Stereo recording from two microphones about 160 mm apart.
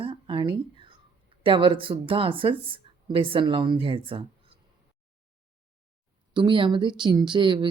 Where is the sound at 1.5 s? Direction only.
30° right (ahead or behind).